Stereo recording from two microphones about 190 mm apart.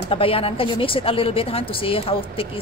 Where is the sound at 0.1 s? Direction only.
30° left (ahead or behind).